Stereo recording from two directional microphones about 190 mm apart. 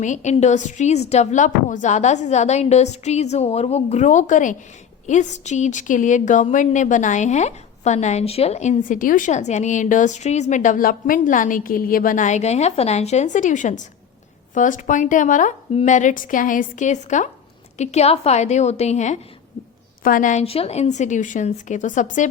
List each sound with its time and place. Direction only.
0.0 s a woman's voice: 40° left (ahead or behind)